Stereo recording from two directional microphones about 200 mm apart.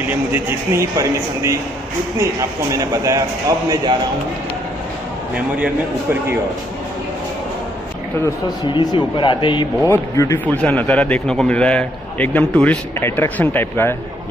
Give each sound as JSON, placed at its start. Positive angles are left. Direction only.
{"t": 0.1, "sound": "a man's voice", "side_deg": -10}
{"t": 2.7, "sound": "a man's voice", "side_deg": -15}
{"t": 8.7, "sound": "a man's voice", "side_deg": 25}